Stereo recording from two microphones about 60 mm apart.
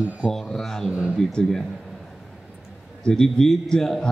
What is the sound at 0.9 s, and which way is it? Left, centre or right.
Speech, centre.